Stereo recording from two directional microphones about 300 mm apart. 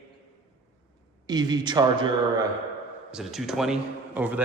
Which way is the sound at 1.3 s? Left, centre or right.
Centre.